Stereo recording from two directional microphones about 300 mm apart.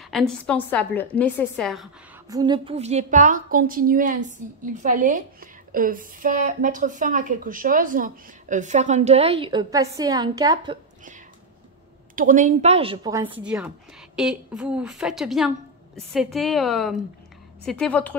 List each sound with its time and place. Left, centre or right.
0.1 s a woman's voice: centre
2.2 s a woman's voice: centre
12.2 s a woman's voice: right; by 18.1 s centre